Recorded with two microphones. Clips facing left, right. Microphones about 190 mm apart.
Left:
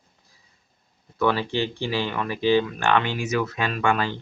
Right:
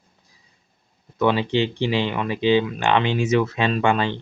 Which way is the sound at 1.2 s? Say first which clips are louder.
Right 3 dB; 20° right (ahead or behind).